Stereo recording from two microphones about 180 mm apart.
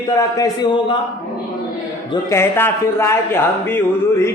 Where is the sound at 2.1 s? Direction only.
15° left (ahead or behind).